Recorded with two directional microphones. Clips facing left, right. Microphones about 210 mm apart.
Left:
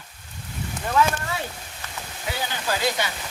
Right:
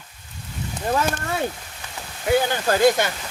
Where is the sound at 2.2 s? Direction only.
50° right (ahead or behind).